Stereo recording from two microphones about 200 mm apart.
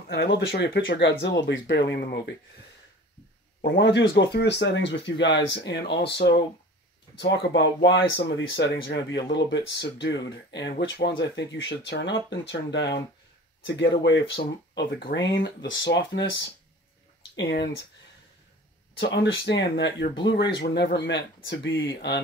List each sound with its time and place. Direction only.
0.1 s speech: 55° left (ahead or behind)
3.6 s speech: 60° left (ahead or behind)
15.0 s speech: 50° left (ahead or behind)
15.3 s speech: 70° left (ahead or behind)
17.4 s speech: 55° left (ahead or behind)
18.9 s speech: 55° left (ahead or behind)